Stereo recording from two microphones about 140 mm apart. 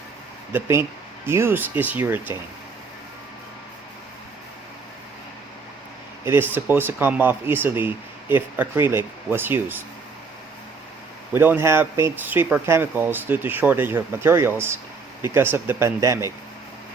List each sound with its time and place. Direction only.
0.5 s speech: 15° right (ahead or behind)
6.2 s speech: 15° right (ahead or behind)
11.3 s speech: 15° right (ahead or behind)